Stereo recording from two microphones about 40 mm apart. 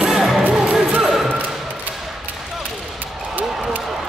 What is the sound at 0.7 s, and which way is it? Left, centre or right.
Music, centre.